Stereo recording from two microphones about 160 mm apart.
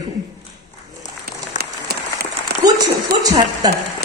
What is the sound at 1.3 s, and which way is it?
Applause, 80° right.